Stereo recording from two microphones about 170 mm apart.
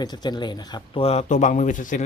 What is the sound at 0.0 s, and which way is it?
Speech, 25° left (ahead or behind).